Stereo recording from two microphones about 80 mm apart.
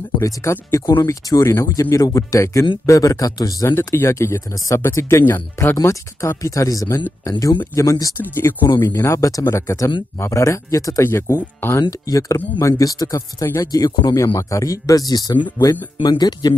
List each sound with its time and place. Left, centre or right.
0.2 s speech: left
3.6 s speech: left
5.8 s speech: left
8.2 s speech: left
11.1 s speech: left
12.1 s speech: left
14.1 s speech: left